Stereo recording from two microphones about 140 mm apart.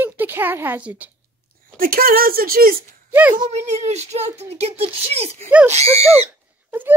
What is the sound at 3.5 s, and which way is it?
Speech, 55° right (ahead or behind).